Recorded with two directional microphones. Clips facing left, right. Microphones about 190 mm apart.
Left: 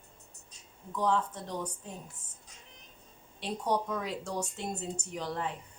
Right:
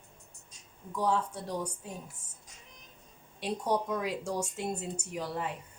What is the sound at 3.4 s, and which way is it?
Speech, 10° right (ahead or behind).